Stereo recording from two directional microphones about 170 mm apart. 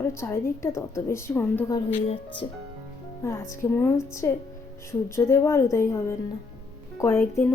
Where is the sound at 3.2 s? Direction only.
20° left (ahead or behind).